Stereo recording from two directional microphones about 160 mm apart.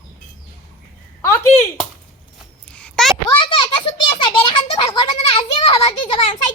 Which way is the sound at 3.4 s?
35° left (ahead or behind).